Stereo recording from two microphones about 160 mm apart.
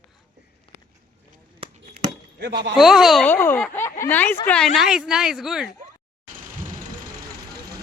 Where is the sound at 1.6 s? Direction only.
35° right (ahead or behind).